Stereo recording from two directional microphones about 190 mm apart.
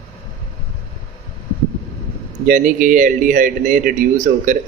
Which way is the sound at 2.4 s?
40° right (ahead or behind).